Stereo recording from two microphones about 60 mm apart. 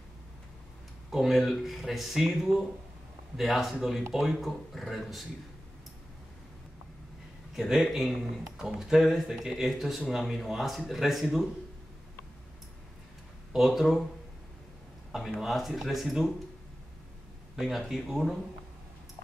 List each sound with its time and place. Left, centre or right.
1.1 s speech: centre
7.5 s speech: centre
13.5 s speech: centre
15.1 s speech: centre
17.6 s speech: centre